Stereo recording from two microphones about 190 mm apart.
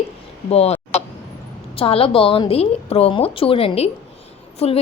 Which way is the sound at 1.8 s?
30° left (ahead or behind).